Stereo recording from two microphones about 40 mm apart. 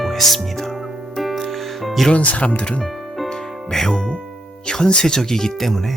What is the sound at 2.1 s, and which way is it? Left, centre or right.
Speech, left.